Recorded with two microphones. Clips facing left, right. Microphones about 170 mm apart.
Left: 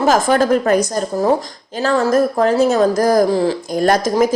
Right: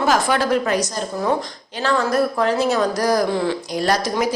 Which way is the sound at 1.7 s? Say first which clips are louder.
Left 4 dB; 40° left (ahead or behind).